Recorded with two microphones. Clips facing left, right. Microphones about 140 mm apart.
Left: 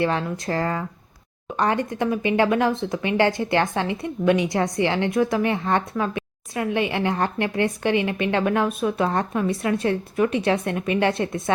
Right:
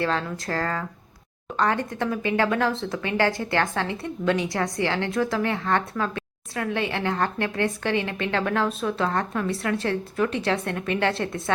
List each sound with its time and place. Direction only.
0.0 s speech: 15° left (ahead or behind)